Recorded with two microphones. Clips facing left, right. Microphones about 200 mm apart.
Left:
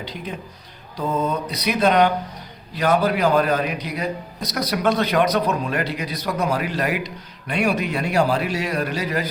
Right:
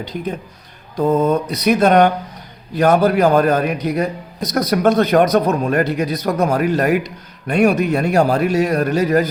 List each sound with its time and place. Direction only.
0.0 s a man's voice: 45° right (ahead or behind)